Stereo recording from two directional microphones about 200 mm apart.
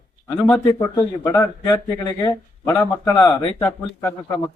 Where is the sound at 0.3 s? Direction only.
10° left (ahead or behind).